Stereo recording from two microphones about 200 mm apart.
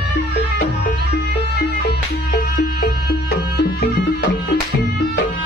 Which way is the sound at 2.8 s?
50° left (ahead or behind).